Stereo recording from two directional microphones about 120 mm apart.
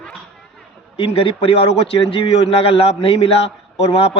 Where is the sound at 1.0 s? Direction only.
45° left (ahead or behind).